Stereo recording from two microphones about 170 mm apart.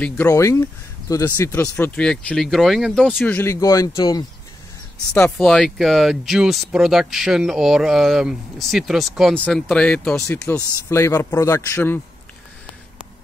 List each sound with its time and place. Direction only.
0.0 s speech: 15° left (ahead or behind)
5.4 s speech: centre (ahead or behind)